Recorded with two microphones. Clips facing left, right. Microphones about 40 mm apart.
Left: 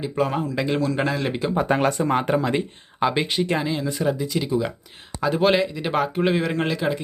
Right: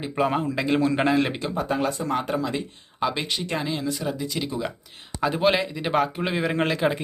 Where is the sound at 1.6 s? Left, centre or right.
Left.